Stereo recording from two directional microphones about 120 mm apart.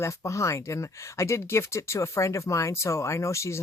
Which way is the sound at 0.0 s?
25° left (ahead or behind).